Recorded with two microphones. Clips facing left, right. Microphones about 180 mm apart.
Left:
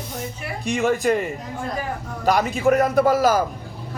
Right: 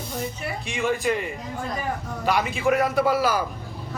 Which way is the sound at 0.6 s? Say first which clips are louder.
Left 5 dB; 45° left (ahead or behind).